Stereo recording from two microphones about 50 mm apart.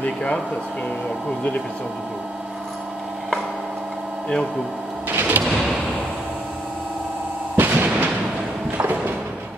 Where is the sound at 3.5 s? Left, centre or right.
Right.